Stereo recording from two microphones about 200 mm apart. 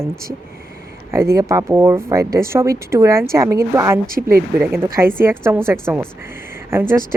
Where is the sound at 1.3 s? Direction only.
15° right (ahead or behind).